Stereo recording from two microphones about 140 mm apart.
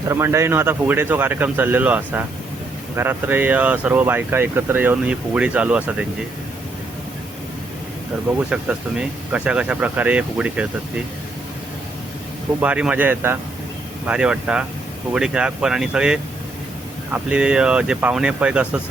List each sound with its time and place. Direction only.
0.1 s speech: 20° right (ahead or behind)
9.0 s speech: 5° right (ahead or behind)
12.5 s speech: 10° right (ahead or behind)